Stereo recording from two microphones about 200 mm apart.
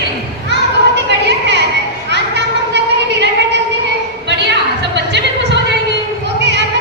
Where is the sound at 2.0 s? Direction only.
60° right (ahead or behind).